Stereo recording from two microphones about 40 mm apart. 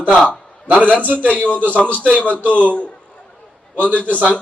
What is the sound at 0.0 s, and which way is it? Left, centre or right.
A man's voice, left.